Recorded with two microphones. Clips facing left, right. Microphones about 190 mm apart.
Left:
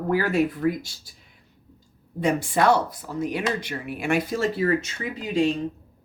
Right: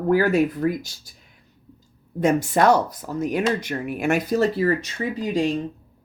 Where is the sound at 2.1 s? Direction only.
45° right (ahead or behind).